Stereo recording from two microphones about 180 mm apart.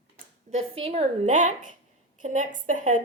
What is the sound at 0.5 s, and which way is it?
A woman's voice, 35° right (ahead or behind).